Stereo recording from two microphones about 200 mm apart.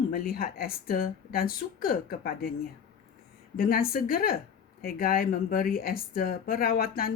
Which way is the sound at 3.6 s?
50° left (ahead or behind).